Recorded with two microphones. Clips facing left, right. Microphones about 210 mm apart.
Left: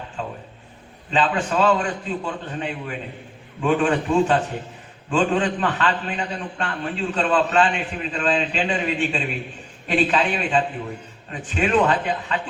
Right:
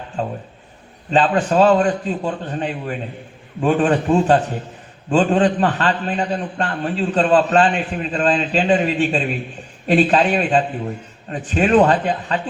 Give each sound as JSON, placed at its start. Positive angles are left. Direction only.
{"t": 0.2, "sound": "a man's voice", "side_deg": -40}